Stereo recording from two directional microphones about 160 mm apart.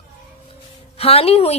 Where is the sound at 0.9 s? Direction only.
40° left (ahead or behind).